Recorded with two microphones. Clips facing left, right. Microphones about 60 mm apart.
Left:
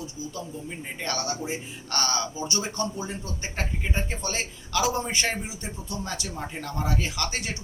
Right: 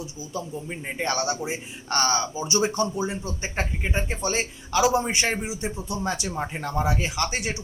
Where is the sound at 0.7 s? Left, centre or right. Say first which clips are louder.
Right 5 dB; right.